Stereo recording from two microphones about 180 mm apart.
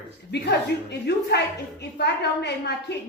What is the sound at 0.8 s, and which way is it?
A woman's voice, 70° left (ahead or behind).